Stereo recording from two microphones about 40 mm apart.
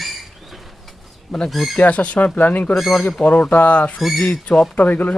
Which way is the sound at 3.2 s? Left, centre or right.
Left.